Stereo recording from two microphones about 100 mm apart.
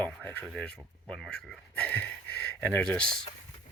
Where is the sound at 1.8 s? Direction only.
15° left (ahead or behind).